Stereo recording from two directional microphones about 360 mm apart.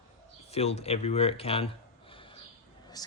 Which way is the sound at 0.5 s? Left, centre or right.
Centre.